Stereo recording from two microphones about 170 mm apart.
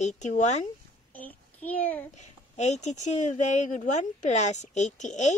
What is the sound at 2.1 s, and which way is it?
Speech, 40° left (ahead or behind).